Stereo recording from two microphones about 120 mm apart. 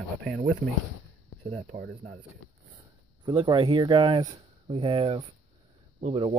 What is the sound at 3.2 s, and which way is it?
Speech, 40° right (ahead or behind).